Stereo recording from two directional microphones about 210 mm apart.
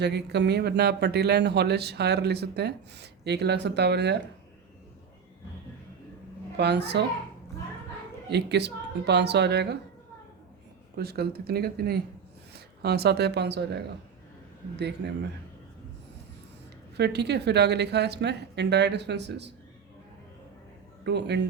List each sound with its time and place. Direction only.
0.0 s speech: 50° right (ahead or behind)
6.6 s speech: 55° right (ahead or behind)
8.3 s speech: 55° right (ahead or behind)
10.9 s speech: 50° right (ahead or behind)
17.0 s speech: 50° right (ahead or behind)
21.0 s speech: 55° right (ahead or behind)